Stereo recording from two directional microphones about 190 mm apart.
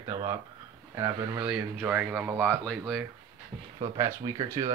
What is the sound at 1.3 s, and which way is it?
Speech, 5° right (ahead or behind).